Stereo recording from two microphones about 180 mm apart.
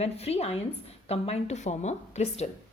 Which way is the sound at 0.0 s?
35° left (ahead or behind).